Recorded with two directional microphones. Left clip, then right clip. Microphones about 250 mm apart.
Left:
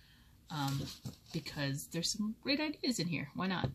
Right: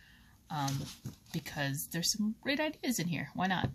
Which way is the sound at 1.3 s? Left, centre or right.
Right.